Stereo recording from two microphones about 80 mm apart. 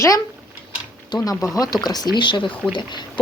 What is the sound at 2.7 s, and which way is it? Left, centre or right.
Speech, left.